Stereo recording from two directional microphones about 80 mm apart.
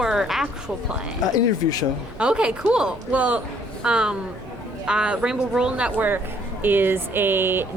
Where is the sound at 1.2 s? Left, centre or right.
Left.